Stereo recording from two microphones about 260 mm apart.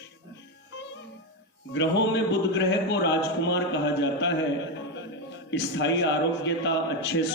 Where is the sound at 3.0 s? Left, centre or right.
Left.